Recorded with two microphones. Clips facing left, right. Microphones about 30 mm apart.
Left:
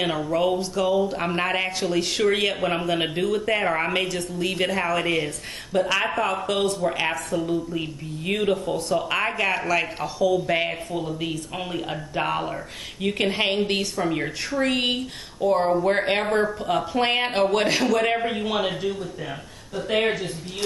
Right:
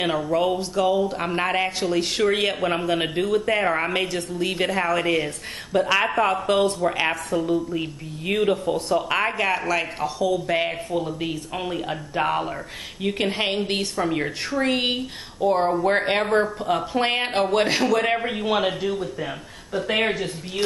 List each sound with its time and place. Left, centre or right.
0.0 s a man's voice: centre
20.1 s speech: right